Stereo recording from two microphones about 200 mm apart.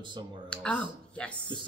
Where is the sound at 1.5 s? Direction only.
25° right (ahead or behind).